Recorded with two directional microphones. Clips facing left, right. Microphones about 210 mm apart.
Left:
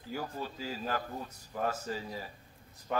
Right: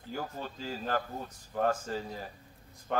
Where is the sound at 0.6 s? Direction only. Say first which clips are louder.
Right 4 dB; 45° right (ahead or behind).